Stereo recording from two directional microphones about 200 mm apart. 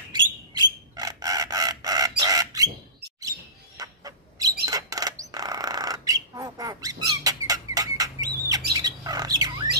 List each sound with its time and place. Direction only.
0.1 s bird: 20° right (ahead or behind)
4.6 s squawk: 20° right (ahead or behind)
7.4 s rodents: 20° right (ahead or behind)
8.7 s squawk: 20° right (ahead or behind)